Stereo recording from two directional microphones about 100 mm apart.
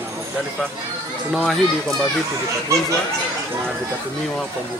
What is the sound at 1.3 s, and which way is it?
Speech, 5° left (ahead or behind).